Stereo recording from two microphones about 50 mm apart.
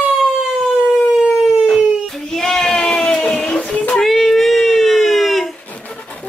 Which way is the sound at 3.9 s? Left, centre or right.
Centre.